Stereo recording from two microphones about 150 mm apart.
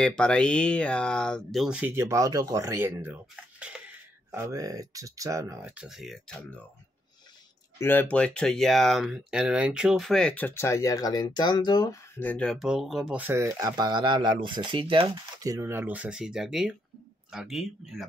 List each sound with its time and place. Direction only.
0.0 s speech: 5° left (ahead or behind)
4.3 s speech: 20° right (ahead or behind)
5.7 s speech: 5° right (ahead or behind)
7.8 s speech: 15° left (ahead or behind); by 12.0 s 30° left (ahead or behind)
12.2 s speech: 10° left (ahead or behind); by 15.1 s 35° right (ahead or behind)
15.4 s speech: 20° right (ahead or behind); by 18.0 s centre (ahead or behind)